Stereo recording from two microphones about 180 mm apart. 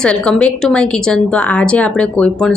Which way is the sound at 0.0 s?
5° left (ahead or behind).